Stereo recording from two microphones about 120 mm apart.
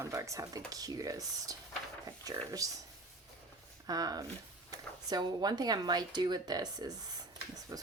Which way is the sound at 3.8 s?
35° right (ahead or behind).